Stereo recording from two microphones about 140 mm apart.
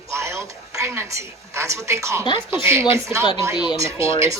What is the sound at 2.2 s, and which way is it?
Speech, 30° left (ahead or behind).